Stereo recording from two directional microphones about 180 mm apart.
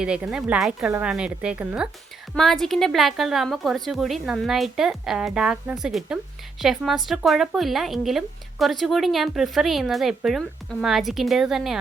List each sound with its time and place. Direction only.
0.0 s speech: 5° right (ahead or behind)